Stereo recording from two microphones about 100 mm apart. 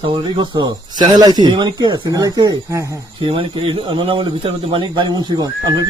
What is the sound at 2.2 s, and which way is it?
Speech, 35° right (ahead or behind).